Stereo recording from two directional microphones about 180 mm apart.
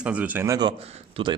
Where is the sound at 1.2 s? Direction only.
30° right (ahead or behind).